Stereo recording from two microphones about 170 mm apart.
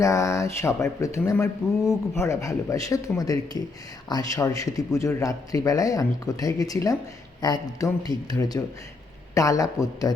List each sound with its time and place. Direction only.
0.0 s a man's voice: 15° left (ahead or behind)